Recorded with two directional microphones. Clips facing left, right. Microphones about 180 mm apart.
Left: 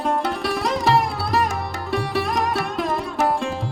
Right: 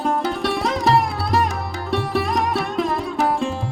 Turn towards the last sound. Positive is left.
turn(degrees=0)  # may be behind; listen again after turning